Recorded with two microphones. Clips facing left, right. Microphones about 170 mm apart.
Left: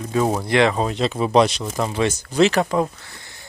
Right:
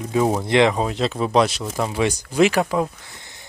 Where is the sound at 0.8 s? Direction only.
Centre (ahead or behind).